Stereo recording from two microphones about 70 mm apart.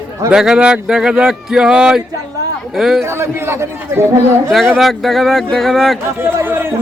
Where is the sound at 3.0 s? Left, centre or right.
Right.